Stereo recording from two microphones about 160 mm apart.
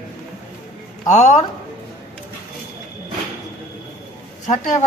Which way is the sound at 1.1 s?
45° left (ahead or behind).